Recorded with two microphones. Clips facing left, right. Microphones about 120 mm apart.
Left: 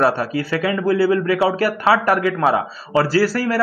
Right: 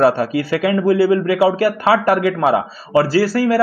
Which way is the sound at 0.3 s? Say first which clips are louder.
Right 3 dB; 40° left (ahead or behind).